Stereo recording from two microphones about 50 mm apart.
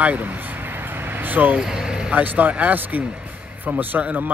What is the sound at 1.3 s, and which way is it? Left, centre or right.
Speech, right.